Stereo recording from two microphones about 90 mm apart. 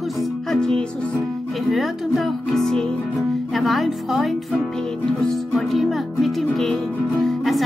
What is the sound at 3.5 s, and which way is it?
Speech, centre (ahead or behind).